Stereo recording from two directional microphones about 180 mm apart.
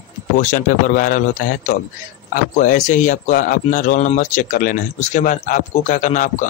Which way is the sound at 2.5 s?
45° left (ahead or behind).